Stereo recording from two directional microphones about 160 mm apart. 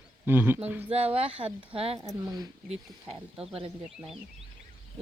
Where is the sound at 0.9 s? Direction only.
40° right (ahead or behind).